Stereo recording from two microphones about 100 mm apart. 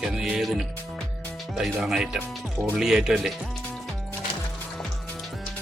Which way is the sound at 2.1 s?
25° right (ahead or behind).